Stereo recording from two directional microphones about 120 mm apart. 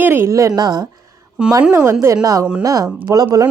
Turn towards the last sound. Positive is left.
turn(degrees=-30)  # may be behind; listen again after turning